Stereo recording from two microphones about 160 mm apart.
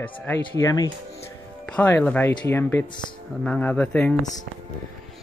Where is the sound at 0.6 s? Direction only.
20° left (ahead or behind).